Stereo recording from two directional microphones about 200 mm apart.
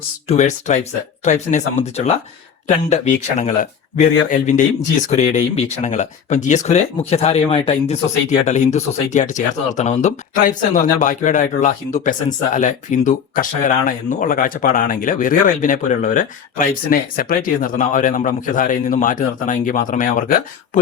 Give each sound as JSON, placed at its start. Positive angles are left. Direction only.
{"t": 0.3, "sound": "speech", "side_deg": 35}